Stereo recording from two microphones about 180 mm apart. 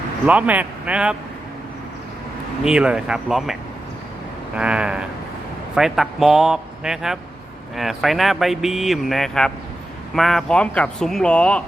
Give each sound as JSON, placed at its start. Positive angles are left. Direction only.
{"t": 0.3, "sound": "speech", "side_deg": -10}
{"t": 2.6, "sound": "speech", "side_deg": -5}